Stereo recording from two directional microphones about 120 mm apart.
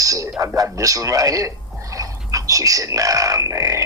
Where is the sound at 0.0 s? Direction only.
30° right (ahead or behind).